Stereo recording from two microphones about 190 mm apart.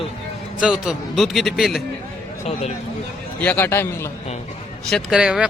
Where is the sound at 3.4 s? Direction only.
10° left (ahead or behind).